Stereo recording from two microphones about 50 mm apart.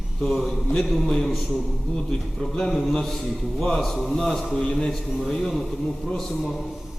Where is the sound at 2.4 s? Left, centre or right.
Centre.